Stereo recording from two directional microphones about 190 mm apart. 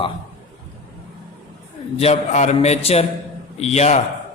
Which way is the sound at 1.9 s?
35° left (ahead or behind).